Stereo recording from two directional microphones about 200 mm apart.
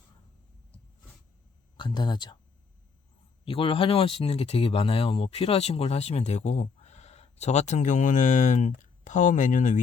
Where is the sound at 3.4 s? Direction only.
25° left (ahead or behind).